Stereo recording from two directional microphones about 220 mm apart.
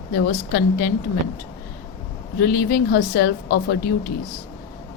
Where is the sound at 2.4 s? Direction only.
45° left (ahead or behind).